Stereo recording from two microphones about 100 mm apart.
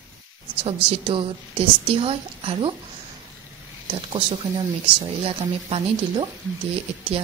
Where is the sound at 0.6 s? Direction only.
65° right (ahead or behind).